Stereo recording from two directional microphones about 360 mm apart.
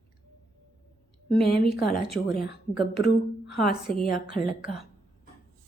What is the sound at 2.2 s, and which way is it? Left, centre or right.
Speech, left.